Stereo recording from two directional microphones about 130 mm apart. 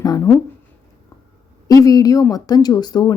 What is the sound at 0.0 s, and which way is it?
Speech, 30° left (ahead or behind).